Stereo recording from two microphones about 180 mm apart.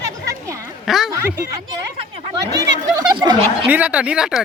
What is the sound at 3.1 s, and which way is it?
Speech, 25° right (ahead or behind).